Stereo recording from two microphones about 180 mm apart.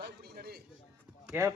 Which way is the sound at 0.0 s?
60° right (ahead or behind).